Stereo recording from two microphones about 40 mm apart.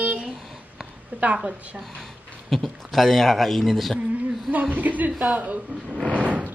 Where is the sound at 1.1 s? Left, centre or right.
Right.